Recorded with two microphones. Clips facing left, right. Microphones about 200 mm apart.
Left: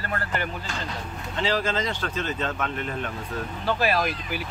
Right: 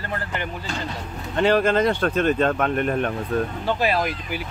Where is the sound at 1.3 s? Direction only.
60° right (ahead or behind).